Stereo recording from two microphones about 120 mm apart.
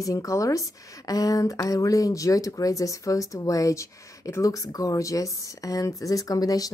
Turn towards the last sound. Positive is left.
turn(degrees=30)  # may be behind; listen again after turning